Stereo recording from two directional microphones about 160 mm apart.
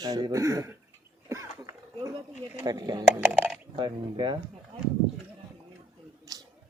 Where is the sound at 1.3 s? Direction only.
20° right (ahead or behind).